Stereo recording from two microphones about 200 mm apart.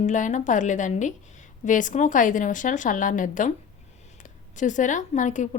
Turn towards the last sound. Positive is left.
turn(degrees=40)  # may be behind; listen again after turning